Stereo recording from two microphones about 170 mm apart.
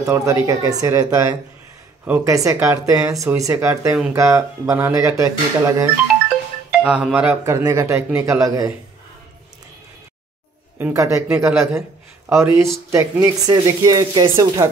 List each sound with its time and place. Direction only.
0.1 s speech: 15° right (ahead or behind)
6.7 s speech: 5° right (ahead or behind)
10.8 s speech: 15° right (ahead or behind)